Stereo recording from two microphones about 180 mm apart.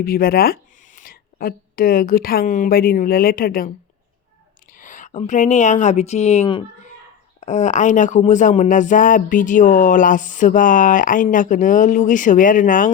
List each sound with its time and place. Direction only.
0.0 s speech: 55° left (ahead or behind)
4.8 s speech: 45° left (ahead or behind)